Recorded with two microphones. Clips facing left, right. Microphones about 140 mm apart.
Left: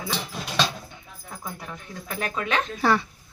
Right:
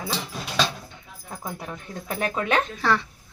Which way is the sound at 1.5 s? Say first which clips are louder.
Right 3 dB; 25° right (ahead or behind).